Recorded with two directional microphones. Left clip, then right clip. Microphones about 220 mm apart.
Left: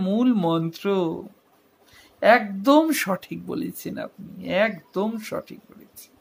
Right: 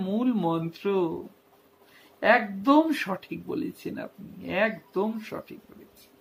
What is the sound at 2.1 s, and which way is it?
Speech, 45° left (ahead or behind).